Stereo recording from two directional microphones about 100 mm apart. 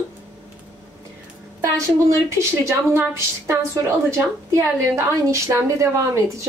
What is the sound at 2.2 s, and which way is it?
A woman's voice, 30° right (ahead or behind).